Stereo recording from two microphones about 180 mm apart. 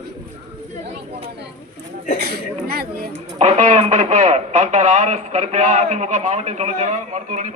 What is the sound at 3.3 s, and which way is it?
Speech, 35° right (ahead or behind).